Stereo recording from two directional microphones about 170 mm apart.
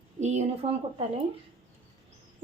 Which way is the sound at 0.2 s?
40° right (ahead or behind).